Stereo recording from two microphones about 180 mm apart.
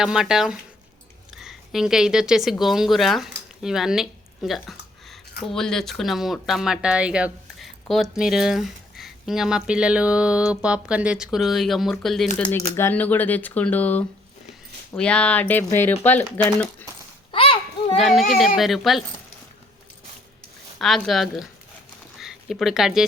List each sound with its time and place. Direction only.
0.0 s a woman's voice: 5° right (ahead or behind)
12.4 s speech: 10° left (ahead or behind)
17.3 s children playing: 30° left (ahead or behind)
17.9 s speech: centre (ahead or behind)
20.7 s speech: centre (ahead or behind)